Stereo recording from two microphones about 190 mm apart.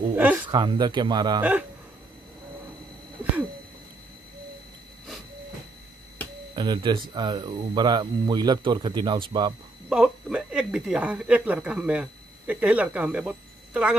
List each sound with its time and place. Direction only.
0.1 s speech: 10° right (ahead or behind)
0.5 s speech: 20° right (ahead or behind)
6.5 s speech: 25° right (ahead or behind)
9.8 s speech: 5° right (ahead or behind)